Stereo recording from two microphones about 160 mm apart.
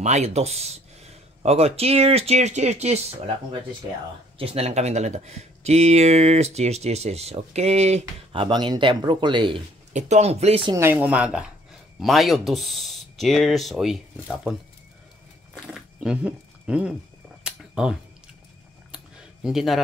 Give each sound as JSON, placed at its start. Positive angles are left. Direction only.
{"t": 0.0, "sound": "speech", "side_deg": -45}
{"t": 4.4, "sound": "speech", "side_deg": -40}
{"t": 8.3, "sound": "speech", "side_deg": -30}
{"t": 9.9, "sound": "speech", "side_deg": -45}
{"t": 10.8, "sound": "speech", "side_deg": -10}
{"t": 15.7, "sound": "speech", "side_deg": -5}
{"t": 17.4, "sound": "a sound", "side_deg": -5}
{"t": 19.4, "sound": "speech", "side_deg": 0}